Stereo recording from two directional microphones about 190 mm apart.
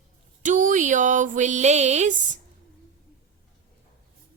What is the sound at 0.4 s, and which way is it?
A woman's voice, 40° right (ahead or behind).